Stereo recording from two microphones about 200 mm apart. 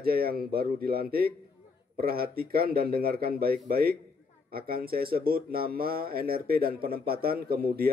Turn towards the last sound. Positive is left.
turn(degrees=-50)  # may be behind; listen again after turning